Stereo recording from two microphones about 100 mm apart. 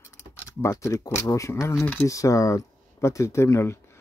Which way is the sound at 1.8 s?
20° left (ahead or behind).